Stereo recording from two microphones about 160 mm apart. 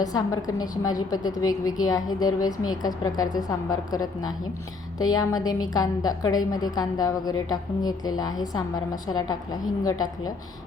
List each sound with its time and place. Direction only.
0.0 s a woman's voice: 25° left (ahead or behind)